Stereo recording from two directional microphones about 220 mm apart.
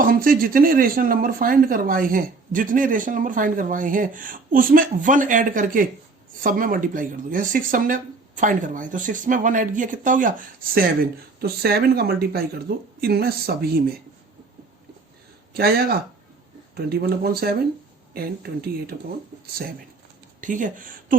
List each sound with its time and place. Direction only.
0.0 s speech: 40° right (ahead or behind)
15.5 s speech: 45° right (ahead or behind)
20.4 s speech: 35° right (ahead or behind)